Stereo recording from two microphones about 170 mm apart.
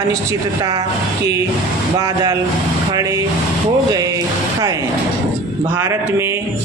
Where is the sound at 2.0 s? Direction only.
20° right (ahead or behind).